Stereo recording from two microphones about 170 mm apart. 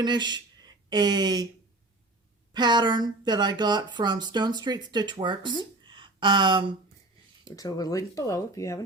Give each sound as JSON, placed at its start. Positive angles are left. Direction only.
{"t": 0.0, "sound": "speech", "side_deg": -25}
{"t": 2.5, "sound": "speech", "side_deg": -25}
{"t": 7.4, "sound": "speech", "side_deg": 20}